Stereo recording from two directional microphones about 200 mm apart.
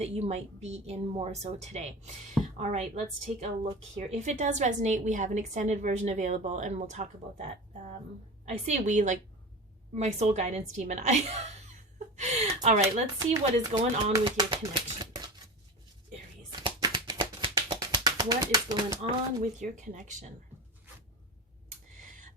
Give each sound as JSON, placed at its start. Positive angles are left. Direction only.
{"t": 0.0, "sound": "a woman's voice", "side_deg": -35}
{"t": 8.4, "sound": "a woman's voice", "side_deg": -35}
{"t": 11.9, "sound": "chuckle", "side_deg": -35}
{"t": 12.6, "sound": "a woman's voice", "side_deg": -35}
{"t": 13.1, "sound": "speech", "side_deg": -15}
{"t": 16.5, "sound": "a sound", "side_deg": -20}
{"t": 19.4, "sound": "a woman's voice", "side_deg": -40}